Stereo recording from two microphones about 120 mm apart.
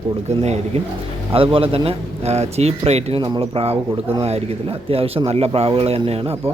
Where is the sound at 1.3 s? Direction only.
50° right (ahead or behind).